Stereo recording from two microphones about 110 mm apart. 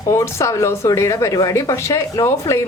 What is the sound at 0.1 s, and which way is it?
Speech, 25° left (ahead or behind).